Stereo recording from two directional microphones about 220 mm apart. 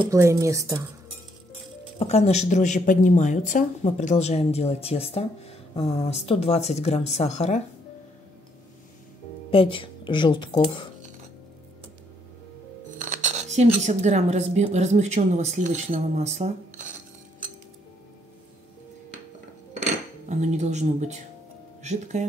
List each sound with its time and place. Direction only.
0.0 s a woman's voice: 15° right (ahead or behind)
2.0 s speech: 30° left (ahead or behind)
9.5 s speech: 25° left (ahead or behind)
12.9 s speech: 35° right (ahead or behind)
20.2 s speech: 30° right (ahead or behind)